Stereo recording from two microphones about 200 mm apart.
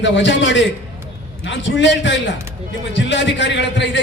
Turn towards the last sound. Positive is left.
turn(degrees=60)  # may be behind; listen again after turning